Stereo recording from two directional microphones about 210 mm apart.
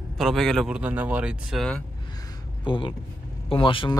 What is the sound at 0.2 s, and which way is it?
Speech, centre (ahead or behind).